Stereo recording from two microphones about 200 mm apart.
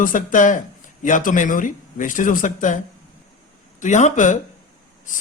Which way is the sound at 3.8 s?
35° left (ahead or behind).